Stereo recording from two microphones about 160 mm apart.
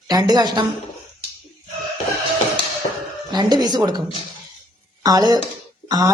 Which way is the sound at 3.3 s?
25° right (ahead or behind).